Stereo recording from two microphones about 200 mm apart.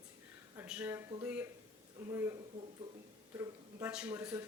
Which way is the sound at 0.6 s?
10° right (ahead or behind).